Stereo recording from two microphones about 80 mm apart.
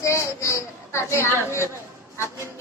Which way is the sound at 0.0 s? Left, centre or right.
Left.